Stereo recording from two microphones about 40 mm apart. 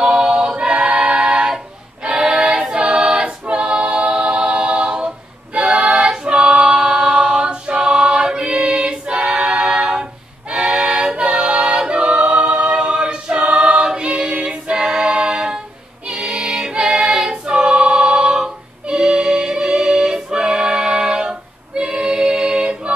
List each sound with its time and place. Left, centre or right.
0.0 s choir: right
2.7 s a capella: right
5.0 s singing: right
8.5 s a capella: right
10.5 s music: right
11.8 s a capella: right
13.4 s choir: right
16.1 s music: centre
16.7 s choir: right
18.9 s music: centre